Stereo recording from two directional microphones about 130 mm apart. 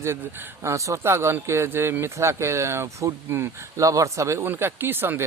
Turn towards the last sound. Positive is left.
turn(degrees=-15)  # may be behind; listen again after turning